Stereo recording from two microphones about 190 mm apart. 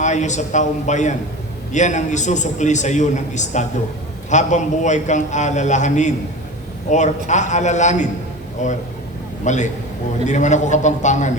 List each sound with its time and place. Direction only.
0.0 s a man's voice: 40° left (ahead or behind)